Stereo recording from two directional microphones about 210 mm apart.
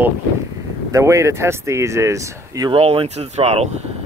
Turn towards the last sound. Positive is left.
turn(degrees=-30)  # may be behind; listen again after turning